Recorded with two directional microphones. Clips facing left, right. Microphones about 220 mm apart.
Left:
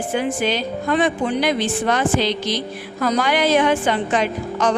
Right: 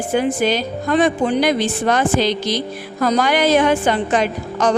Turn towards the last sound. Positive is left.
turn(degrees=-40)  # may be behind; listen again after turning